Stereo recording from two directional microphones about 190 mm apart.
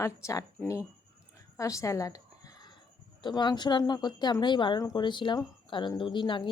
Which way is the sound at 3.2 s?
25° left (ahead or behind).